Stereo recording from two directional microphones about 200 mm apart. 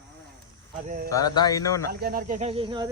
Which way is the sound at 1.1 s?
20° left (ahead or behind).